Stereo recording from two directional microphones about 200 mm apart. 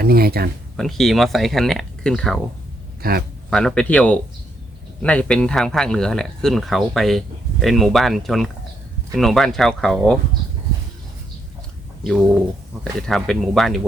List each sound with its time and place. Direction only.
0.0 s speech: 50° right (ahead or behind)
0.8 s speech: centre (ahead or behind)
3.0 s a man's voice: 50° right (ahead or behind)
3.5 s speech: 5° left (ahead or behind)
12.8 s speech: 5° left (ahead or behind)